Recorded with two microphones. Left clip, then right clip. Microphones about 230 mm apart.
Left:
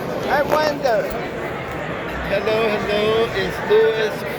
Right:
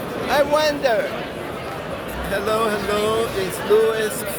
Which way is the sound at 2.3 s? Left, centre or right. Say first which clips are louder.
Left 2 dB; right.